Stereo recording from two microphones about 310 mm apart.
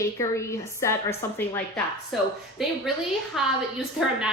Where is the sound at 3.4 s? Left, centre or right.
Centre.